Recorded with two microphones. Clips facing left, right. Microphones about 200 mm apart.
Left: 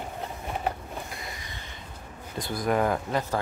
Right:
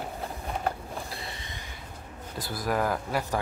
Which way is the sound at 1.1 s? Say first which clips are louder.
Even; 30° right (ahead or behind).